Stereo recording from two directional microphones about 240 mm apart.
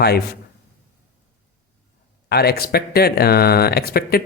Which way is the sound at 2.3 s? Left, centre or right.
Left.